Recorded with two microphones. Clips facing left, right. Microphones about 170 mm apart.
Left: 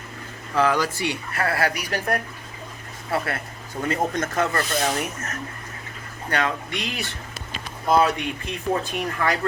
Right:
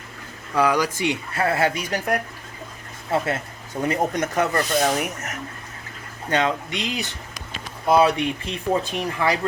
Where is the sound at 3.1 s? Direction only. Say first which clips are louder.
Right 3 dB; 25° right (ahead or behind).